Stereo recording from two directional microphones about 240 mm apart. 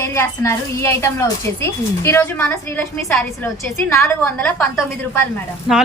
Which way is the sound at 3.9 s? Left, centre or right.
Centre.